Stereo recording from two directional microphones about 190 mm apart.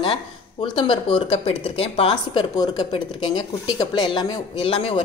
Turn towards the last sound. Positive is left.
turn(degrees=30)  # may be behind; listen again after turning